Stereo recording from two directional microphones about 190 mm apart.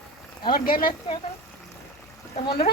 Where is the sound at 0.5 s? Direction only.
50° left (ahead or behind).